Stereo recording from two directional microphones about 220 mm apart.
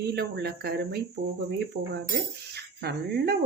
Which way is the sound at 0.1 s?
45° right (ahead or behind).